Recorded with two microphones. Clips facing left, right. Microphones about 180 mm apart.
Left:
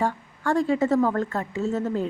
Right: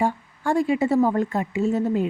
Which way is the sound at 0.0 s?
15° right (ahead or behind).